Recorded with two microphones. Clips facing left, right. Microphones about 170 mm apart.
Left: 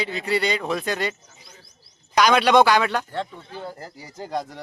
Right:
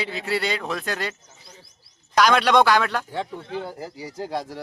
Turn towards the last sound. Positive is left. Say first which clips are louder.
# even
turn(degrees=-5)  # may be behind; listen again after turning